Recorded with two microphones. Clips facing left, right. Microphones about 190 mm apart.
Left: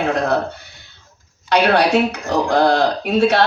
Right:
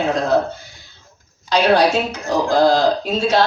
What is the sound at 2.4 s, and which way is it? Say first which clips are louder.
Speech: right 1 dB; 60° left (ahead or behind).